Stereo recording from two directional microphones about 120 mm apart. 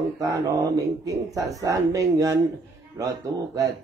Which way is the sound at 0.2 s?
30° right (ahead or behind).